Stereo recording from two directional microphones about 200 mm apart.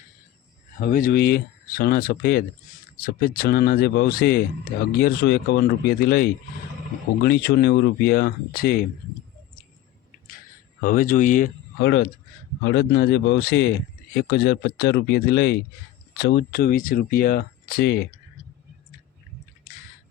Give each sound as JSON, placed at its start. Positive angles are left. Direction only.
{"t": 0.8, "sound": "speech", "side_deg": 45}
{"t": 10.8, "sound": "speech", "side_deg": 40}
{"t": 11.8, "sound": "speech", "side_deg": 60}